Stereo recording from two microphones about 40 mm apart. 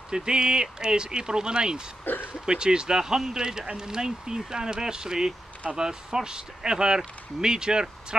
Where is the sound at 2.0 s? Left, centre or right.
Left.